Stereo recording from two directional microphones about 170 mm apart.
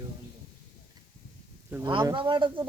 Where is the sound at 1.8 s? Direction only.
25° right (ahead or behind).